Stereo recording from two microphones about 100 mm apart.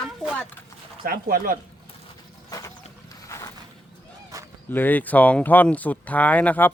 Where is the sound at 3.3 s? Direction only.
35° left (ahead or behind).